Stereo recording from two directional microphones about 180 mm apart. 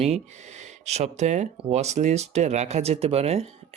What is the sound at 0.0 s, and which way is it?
Speech, 40° right (ahead or behind).